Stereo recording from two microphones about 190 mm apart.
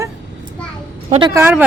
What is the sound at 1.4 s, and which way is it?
Speech, 10° right (ahead or behind).